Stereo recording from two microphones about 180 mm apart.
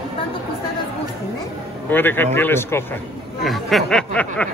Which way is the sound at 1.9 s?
10° left (ahead or behind).